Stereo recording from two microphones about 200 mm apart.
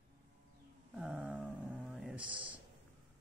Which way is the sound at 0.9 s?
5° right (ahead or behind).